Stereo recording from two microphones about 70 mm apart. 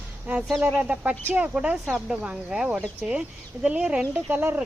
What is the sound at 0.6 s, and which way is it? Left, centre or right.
Speech, right.